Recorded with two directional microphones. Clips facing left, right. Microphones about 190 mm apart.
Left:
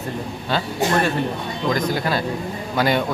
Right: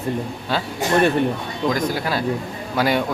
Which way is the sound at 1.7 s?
5° right (ahead or behind).